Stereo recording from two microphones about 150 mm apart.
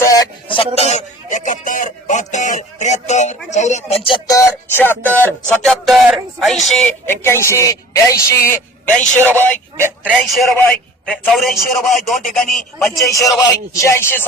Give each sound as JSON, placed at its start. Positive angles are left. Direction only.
{"t": 0.0, "sound": "a sound", "side_deg": 20}
{"t": 0.4, "sound": "speech", "side_deg": 35}
{"t": 0.8, "sound": "speech", "side_deg": 50}
{"t": 4.0, "sound": "music", "side_deg": 35}
{"t": 4.4, "sound": "speech", "side_deg": 15}
{"t": 5.5, "sound": "a man's voice", "side_deg": 0}
{"t": 7.0, "sound": "speech", "side_deg": 15}
{"t": 9.7, "sound": "speech", "side_deg": -15}
{"t": 10.6, "sound": "a man's voice", "side_deg": 10}
{"t": 13.4, "sound": "speech", "side_deg": 20}